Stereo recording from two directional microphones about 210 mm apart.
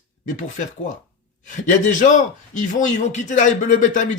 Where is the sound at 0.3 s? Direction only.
35° left (ahead or behind).